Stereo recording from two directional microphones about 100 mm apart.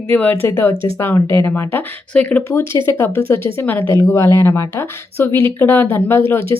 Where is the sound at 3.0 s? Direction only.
25° left (ahead or behind).